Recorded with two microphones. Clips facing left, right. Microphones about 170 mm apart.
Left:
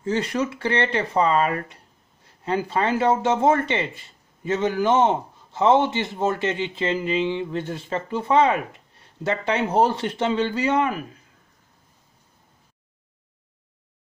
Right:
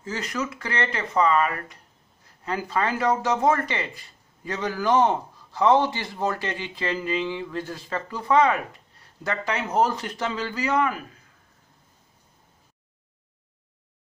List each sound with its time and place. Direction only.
0.0 s speech: 30° left (ahead or behind)